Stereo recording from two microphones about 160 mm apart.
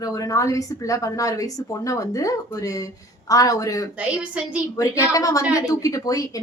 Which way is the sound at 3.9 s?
5° right (ahead or behind).